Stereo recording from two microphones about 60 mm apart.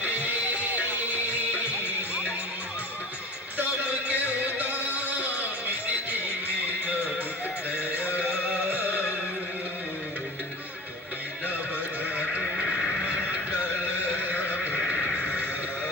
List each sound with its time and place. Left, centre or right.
3.6 s a sound: right
5.4 s music: right
7.9 s music: left
8.2 s music: centre
8.7 s music: left
13.6 s neigh: left